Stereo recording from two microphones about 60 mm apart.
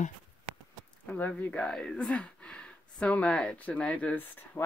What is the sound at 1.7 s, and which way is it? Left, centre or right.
Speech, centre.